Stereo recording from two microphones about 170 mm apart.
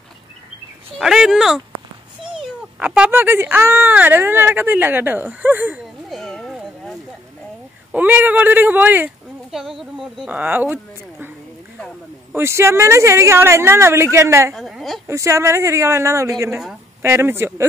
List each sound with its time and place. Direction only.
0.9 s speech: centre (ahead or behind)
2.8 s speech: 5° right (ahead or behind)
6.0 s cat: centre (ahead or behind)
7.9 s speech: 10° right (ahead or behind)
14.5 s speech: centre (ahead or behind)
15.0 s speech: 15° right (ahead or behind)